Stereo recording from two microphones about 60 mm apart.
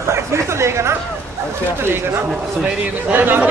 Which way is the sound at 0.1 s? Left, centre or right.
Right.